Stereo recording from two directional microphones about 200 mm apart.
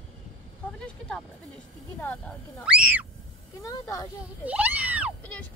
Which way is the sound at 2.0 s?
5° left (ahead or behind).